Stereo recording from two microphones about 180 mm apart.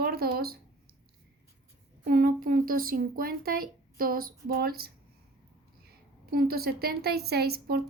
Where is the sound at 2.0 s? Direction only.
55° right (ahead or behind).